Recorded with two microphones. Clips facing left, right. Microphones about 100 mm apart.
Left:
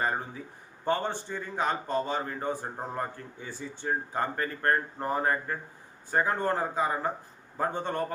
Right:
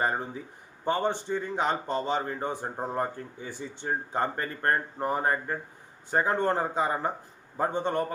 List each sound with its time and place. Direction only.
0.9 s a man's voice: 15° right (ahead or behind)